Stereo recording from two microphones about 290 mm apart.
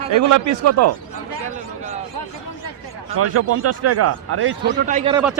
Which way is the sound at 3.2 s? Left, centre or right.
Right.